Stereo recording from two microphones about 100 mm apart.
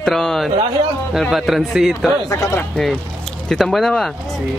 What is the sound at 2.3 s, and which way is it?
Speech, 35° left (ahead or behind).